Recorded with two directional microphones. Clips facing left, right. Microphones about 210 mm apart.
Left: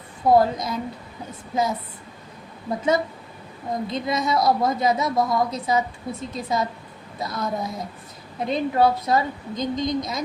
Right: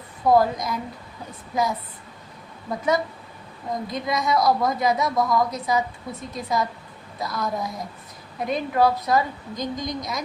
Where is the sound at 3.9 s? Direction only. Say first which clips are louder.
Even; 25° left (ahead or behind).